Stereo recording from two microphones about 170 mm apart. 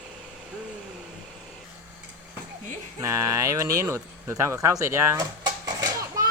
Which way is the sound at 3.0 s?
20° right (ahead or behind).